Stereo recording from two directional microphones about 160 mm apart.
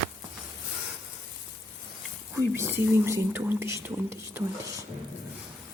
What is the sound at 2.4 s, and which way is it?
Speech, 15° right (ahead or behind).